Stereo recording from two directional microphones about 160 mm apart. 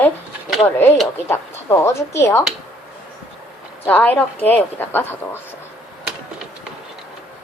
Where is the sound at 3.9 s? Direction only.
10° left (ahead or behind).